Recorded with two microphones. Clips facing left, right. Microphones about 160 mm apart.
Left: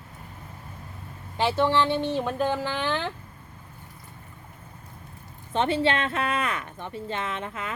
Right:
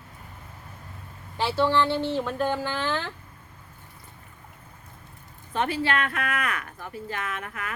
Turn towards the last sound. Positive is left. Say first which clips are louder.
# left 2 dB
turn(degrees=25)  # may be behind; listen again after turning